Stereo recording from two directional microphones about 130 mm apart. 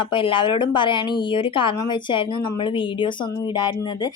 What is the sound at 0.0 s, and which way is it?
A woman's voice, 40° left (ahead or behind).